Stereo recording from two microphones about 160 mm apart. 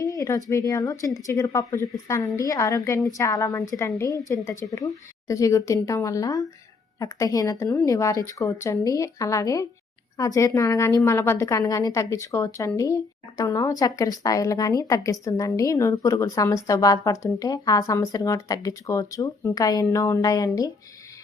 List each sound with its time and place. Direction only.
0.0 s a woman's voice: 20° left (ahead or behind)